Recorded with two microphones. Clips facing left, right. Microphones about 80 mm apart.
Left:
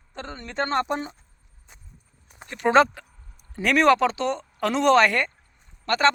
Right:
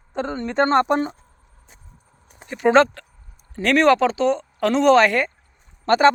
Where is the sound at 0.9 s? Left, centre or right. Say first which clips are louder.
Right 8 dB; right.